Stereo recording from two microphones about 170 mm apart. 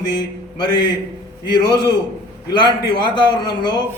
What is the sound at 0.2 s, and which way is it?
Speech, 25° left (ahead or behind).